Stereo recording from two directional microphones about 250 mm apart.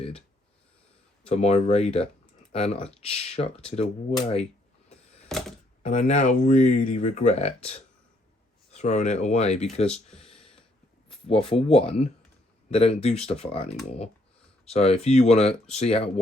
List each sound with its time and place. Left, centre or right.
1.2 s speech: left
5.3 s typewriter: centre
5.8 s speech: left
11.3 s speech: left
14.7 s speech: left